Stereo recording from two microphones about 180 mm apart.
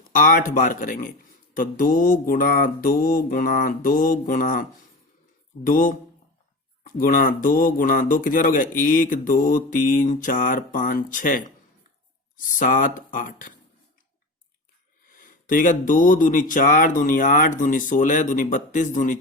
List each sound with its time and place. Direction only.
0.1 s speech: 50° left (ahead or behind)
5.6 s speech: 50° left (ahead or behind)
15.1 s speech: 50° left (ahead or behind)